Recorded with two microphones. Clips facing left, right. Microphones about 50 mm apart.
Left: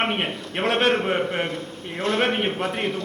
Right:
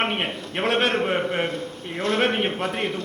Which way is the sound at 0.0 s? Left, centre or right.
Centre.